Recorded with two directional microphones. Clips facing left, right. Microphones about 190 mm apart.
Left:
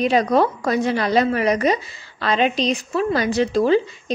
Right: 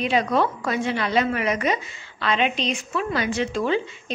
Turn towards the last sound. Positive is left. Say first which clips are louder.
# left 6 dB
turn(degrees=35)  # may be behind; listen again after turning